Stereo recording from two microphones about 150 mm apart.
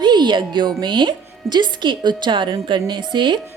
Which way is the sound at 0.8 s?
30° right (ahead or behind).